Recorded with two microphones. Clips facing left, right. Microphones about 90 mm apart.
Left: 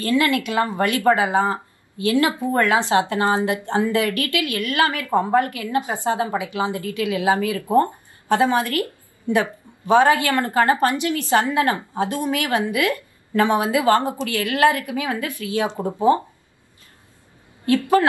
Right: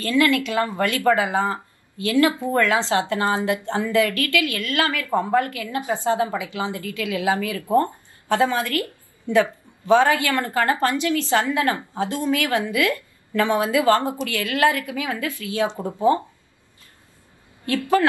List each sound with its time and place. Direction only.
0.0 s a woman's voice: 20° left (ahead or behind)
17.6 s a woman's voice: 20° left (ahead or behind)